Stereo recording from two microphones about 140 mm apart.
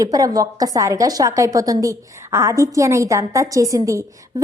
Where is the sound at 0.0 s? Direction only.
25° right (ahead or behind).